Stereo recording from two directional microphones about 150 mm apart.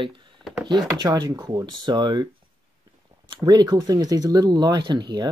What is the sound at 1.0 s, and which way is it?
Speech, 30° right (ahead or behind).